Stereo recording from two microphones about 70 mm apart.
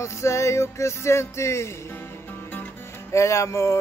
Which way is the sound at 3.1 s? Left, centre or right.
Left.